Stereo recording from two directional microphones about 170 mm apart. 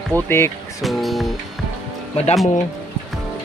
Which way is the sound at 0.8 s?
Centre (ahead or behind).